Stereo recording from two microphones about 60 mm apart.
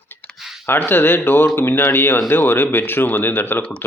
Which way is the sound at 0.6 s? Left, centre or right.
Left.